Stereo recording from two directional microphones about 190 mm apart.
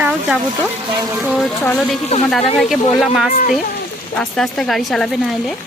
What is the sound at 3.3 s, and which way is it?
Speech, 50° left (ahead or behind).